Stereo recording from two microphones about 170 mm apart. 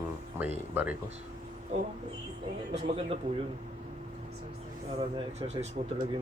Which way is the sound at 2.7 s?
35° right (ahead or behind).